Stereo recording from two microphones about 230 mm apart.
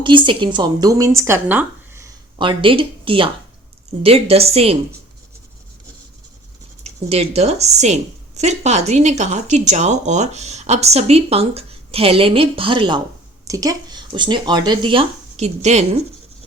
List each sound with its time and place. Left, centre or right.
0.3 s speech: right
2.4 s speech: right
6.8 s speech: right